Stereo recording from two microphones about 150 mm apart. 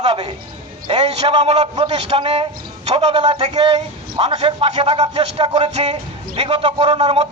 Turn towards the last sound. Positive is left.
turn(degrees=-35)  # may be behind; listen again after turning